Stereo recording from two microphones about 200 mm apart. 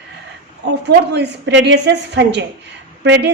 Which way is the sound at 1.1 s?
60° right (ahead or behind).